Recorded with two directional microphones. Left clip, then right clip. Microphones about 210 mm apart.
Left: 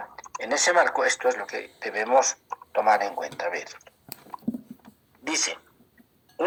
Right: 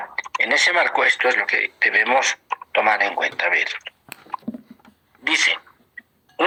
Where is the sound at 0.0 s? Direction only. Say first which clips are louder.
Right 12 dB; 35° right (ahead or behind).